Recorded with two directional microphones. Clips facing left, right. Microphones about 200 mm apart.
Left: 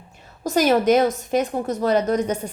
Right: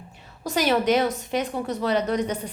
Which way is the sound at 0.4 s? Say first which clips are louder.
Left 4 dB; 45° left (ahead or behind).